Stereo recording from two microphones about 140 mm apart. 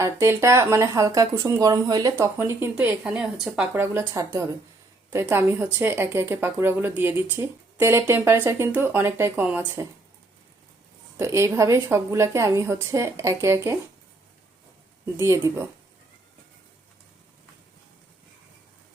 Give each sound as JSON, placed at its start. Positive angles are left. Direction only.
{"t": 0.0, "sound": "speech", "side_deg": -20}
{"t": 3.8, "sound": "speech", "side_deg": -20}
{"t": 11.2, "sound": "speech", "side_deg": -20}
{"t": 15.2, "sound": "speech", "side_deg": -20}